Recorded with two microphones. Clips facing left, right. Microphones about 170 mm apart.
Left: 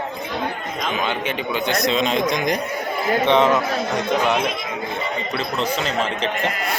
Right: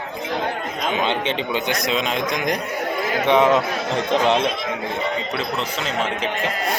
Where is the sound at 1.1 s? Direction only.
25° right (ahead or behind).